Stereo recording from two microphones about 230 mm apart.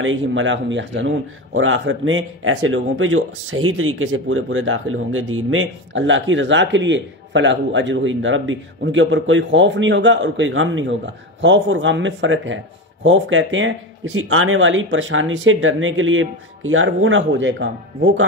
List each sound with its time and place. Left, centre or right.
0.0 s speech: right